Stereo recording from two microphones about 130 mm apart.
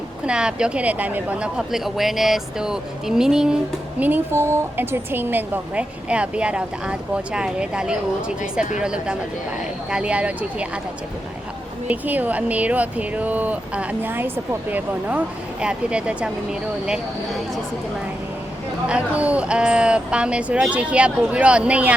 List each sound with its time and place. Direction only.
0.3 s a woman's voice: 5° right (ahead or behind)
4.0 s a woman's voice: 15° right (ahead or behind)
11.9 s a woman's voice: 15° right (ahead or behind)
18.9 s a woman's voice: 10° right (ahead or behind)